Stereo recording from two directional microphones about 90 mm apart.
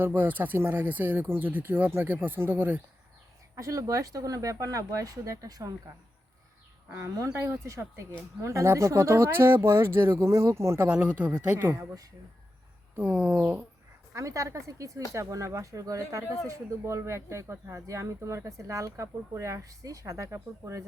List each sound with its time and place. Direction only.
0.0 s speech: 20° right (ahead or behind)
3.5 s speech: 35° right (ahead or behind)
6.9 s speech: 35° right (ahead or behind)
10.8 s speech: 15° right (ahead or behind)
11.7 s speech: 35° right (ahead or behind)
13.0 s speech: 15° right (ahead or behind)
14.1 s speech: 35° right (ahead or behind)